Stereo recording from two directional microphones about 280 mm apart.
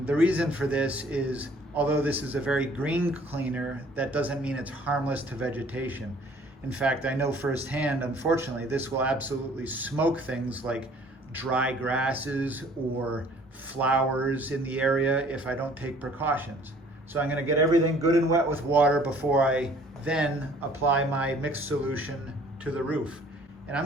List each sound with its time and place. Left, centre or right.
0.0 s a man's voice: centre
13.7 s a man's voice: centre